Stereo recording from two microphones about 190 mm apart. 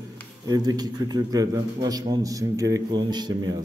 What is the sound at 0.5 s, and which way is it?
A man's voice, 20° right (ahead or behind).